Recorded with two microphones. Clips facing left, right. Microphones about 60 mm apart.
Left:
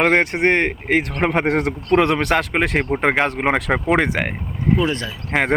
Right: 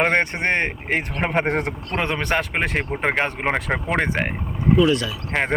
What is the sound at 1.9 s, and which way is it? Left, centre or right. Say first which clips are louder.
Speech: left 8 dB; left.